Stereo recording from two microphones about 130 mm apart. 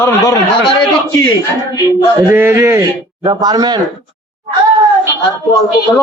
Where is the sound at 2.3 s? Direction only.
20° right (ahead or behind).